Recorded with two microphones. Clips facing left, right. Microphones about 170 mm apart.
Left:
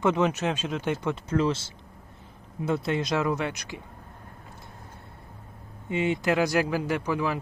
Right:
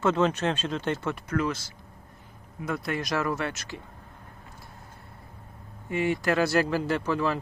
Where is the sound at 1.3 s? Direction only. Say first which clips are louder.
Left 4 dB; 25° left (ahead or behind).